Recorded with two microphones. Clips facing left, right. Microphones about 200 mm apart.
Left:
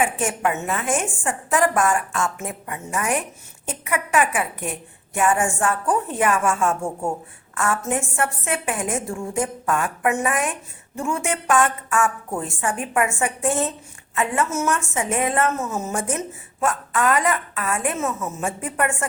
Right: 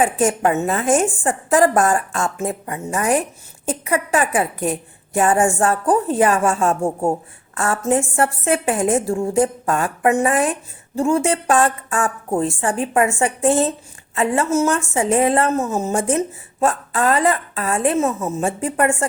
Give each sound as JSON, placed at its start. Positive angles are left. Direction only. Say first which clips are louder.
{"t": 0.0, "sound": "a woman's voice", "louder": "right 5 dB", "side_deg": -35}